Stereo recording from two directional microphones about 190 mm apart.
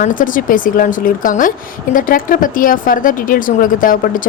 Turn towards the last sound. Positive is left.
turn(degrees=45)  # may be behind; listen again after turning